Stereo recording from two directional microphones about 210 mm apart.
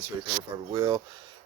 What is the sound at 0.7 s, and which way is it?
Speech, 25° right (ahead or behind).